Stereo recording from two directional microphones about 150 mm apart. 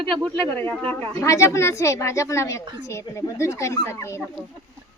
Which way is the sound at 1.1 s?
20° left (ahead or behind).